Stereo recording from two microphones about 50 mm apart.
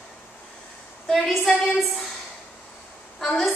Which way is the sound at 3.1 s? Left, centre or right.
Centre.